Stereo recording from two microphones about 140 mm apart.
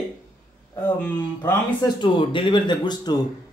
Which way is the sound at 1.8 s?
35° left (ahead or behind).